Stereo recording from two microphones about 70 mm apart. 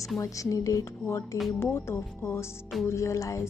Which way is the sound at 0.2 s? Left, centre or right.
Left.